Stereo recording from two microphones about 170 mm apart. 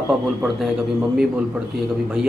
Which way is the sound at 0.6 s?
Centre (ahead or behind).